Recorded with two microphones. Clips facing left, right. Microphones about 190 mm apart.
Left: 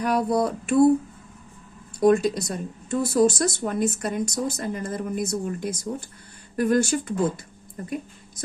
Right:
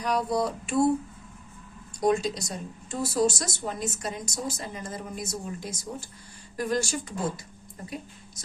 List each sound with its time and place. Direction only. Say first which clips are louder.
0.0 s speech: left 4 dB; 55° left (ahead or behind)
2.0 s speech: left 6 dB; 55° left (ahead or behind)